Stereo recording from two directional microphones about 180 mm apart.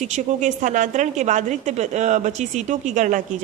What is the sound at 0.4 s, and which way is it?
A woman's voice, 45° right (ahead or behind).